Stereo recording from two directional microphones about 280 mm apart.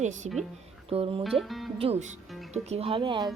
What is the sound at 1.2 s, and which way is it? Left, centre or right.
Music, centre.